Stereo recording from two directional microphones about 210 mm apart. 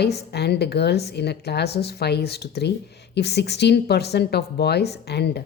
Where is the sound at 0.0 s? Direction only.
50° left (ahead or behind).